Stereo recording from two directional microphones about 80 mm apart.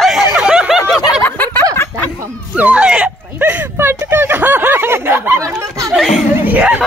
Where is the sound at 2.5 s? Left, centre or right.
Centre.